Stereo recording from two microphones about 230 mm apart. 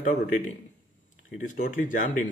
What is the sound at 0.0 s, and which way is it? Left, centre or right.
Speech, left.